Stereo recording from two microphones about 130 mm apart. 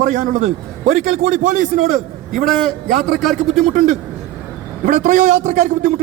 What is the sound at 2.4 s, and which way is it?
Speech, centre (ahead or behind).